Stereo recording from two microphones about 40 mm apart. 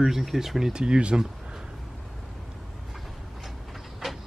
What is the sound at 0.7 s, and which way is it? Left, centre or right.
Speech, right.